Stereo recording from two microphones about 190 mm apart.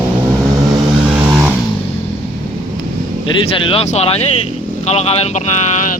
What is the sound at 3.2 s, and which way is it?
Speech, 30° left (ahead or behind).